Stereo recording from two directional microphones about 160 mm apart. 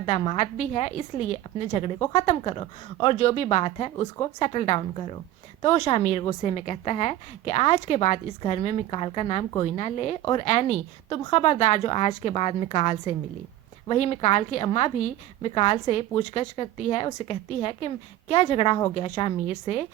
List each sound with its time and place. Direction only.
0.3 s a woman's voice: 45° left (ahead or behind)
3.2 s a woman's voice: 40° left (ahead or behind)